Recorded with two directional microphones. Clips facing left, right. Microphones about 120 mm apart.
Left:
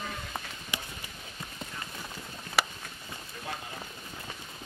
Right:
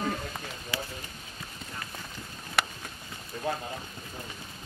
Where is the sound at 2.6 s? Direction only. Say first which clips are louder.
Left 1 dB; centre (ahead or behind).